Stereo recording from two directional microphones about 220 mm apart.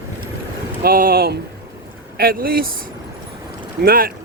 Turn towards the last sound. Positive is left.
turn(degrees=-40)  # may be behind; listen again after turning